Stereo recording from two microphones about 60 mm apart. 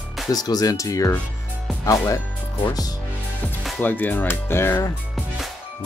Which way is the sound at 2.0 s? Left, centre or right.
Left.